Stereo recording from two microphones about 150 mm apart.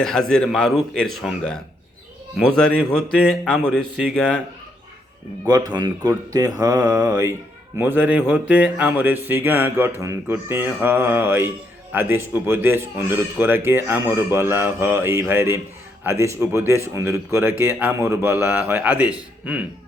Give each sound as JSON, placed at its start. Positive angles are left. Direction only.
{"t": 0.0, "sound": "a man's voice", "side_deg": 5}
{"t": 5.5, "sound": "speech", "side_deg": -25}